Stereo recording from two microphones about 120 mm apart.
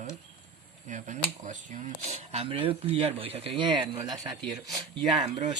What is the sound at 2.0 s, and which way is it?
Speech, 60° right (ahead or behind).